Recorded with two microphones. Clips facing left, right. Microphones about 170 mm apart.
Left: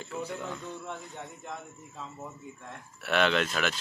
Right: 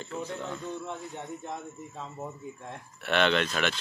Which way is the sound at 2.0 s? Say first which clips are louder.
Right 2 dB; 25° right (ahead or behind).